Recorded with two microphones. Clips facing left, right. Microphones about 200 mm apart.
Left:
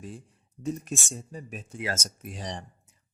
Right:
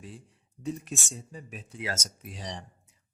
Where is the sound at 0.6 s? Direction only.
45° left (ahead or behind).